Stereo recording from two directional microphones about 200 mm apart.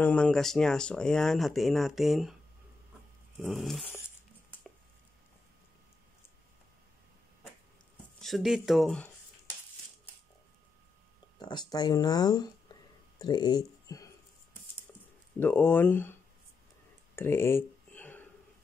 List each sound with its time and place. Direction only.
0.0 s speech: 5° left (ahead or behind)
3.3 s speech: centre (ahead or behind)
8.2 s speech: centre (ahead or behind)
11.3 s speech: 20° left (ahead or behind)
15.3 s speech: 10° left (ahead or behind)
17.1 s a sound: 10° left (ahead or behind)